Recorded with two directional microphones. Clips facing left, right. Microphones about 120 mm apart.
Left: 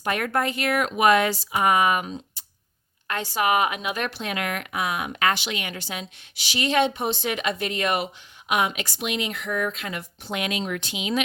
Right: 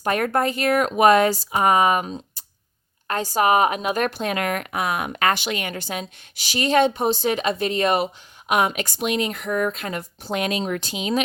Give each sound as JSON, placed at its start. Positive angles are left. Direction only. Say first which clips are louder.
{"t": 0.0, "sound": "speech", "louder": "right 4 dB", "side_deg": -40}